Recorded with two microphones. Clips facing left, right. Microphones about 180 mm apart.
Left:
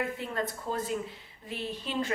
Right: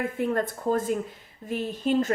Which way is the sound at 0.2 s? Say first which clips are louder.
Right 8 dB; 50° right (ahead or behind).